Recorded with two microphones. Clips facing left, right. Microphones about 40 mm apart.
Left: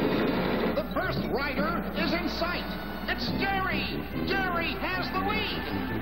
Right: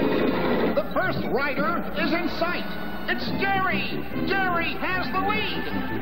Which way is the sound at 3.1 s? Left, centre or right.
Centre.